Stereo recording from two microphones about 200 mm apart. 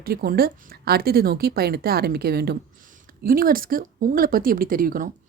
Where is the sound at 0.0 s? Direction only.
50° right (ahead or behind).